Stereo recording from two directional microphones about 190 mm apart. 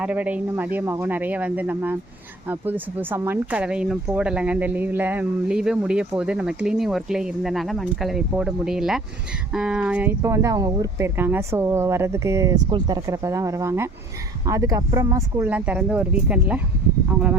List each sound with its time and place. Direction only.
0.0 s speech: 5° right (ahead or behind)